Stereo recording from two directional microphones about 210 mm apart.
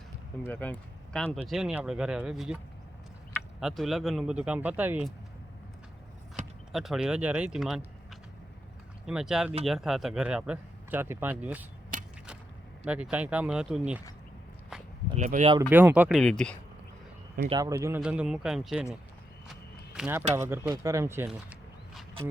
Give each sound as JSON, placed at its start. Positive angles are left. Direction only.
{"t": 0.4, "sound": "speech", "side_deg": 5}
{"t": 3.6, "sound": "speech", "side_deg": 0}
{"t": 6.7, "sound": "speech", "side_deg": 0}
{"t": 11.9, "sound": "a sound", "side_deg": -40}
{"t": 12.8, "sound": "speech", "side_deg": -5}
{"t": 15.1, "sound": "speech", "side_deg": -35}
{"t": 15.7, "sound": "speech", "side_deg": -10}
{"t": 17.5, "sound": "speech", "side_deg": -15}
{"t": 20.0, "sound": "speech", "side_deg": -10}